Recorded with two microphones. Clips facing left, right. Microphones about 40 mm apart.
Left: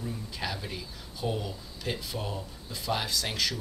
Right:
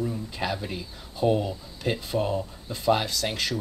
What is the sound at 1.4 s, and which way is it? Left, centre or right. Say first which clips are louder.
Speech: right 6 dB; right.